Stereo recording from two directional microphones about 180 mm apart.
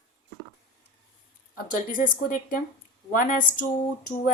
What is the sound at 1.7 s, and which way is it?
Speech, 50° left (ahead or behind).